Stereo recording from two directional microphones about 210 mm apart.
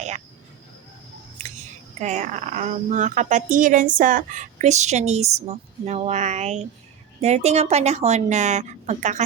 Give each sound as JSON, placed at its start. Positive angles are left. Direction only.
{"t": 2.0, "sound": "speech", "side_deg": -35}